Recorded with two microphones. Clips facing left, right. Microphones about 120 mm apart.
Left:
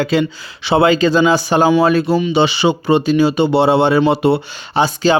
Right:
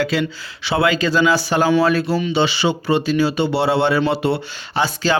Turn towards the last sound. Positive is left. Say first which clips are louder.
# left 5 dB
turn(degrees=20)  # may be behind; listen again after turning